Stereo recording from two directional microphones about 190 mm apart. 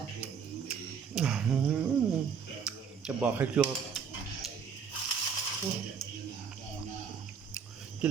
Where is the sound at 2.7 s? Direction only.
5° right (ahead or behind).